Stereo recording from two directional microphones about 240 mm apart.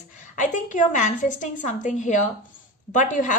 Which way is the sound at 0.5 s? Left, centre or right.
Left.